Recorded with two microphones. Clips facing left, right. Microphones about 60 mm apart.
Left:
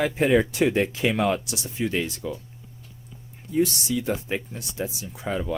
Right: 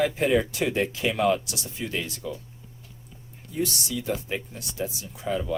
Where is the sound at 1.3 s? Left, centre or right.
Left.